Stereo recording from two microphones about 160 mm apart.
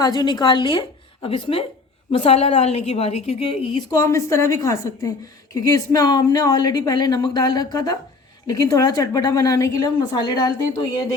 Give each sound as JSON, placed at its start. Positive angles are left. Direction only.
{"t": 0.0, "sound": "a woman's voice", "side_deg": 25}
{"t": 3.9, "sound": "speech", "side_deg": 20}